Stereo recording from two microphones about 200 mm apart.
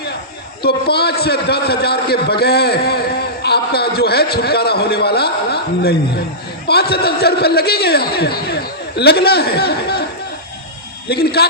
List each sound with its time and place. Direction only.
0.6 s a man's voice: 55° left (ahead or behind)
11.1 s a man's voice: 50° left (ahead or behind)